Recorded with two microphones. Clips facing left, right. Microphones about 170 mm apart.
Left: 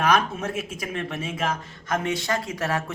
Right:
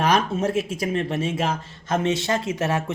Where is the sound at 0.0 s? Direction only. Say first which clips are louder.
Right 2 dB; 30° right (ahead or behind).